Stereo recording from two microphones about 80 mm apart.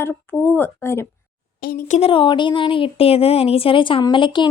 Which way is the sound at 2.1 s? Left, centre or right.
Left.